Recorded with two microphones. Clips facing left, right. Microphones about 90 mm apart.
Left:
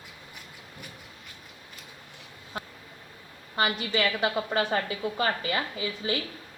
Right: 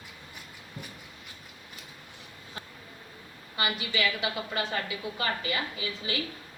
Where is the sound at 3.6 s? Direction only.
40° left (ahead or behind).